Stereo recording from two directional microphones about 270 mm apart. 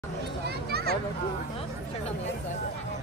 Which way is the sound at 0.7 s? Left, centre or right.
Right.